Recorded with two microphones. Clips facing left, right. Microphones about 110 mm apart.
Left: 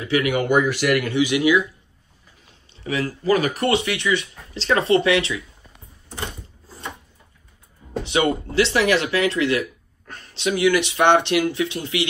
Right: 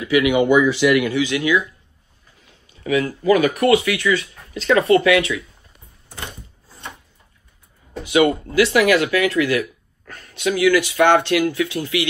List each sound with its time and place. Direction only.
0.0 s speech: 35° left (ahead or behind)
0.4 s speech: 50° left (ahead or behind)
1.1 s speech: 15° left (ahead or behind)
2.7 s speech: 35° left (ahead or behind)
8.0 s speech: 30° left (ahead or behind)